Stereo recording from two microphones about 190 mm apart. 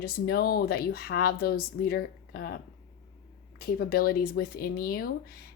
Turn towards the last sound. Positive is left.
turn(degrees=50)  # may be behind; listen again after turning